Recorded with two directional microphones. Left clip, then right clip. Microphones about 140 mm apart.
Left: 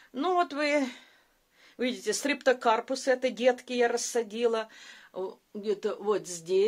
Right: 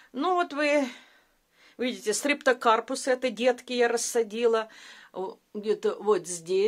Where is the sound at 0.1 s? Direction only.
20° right (ahead or behind).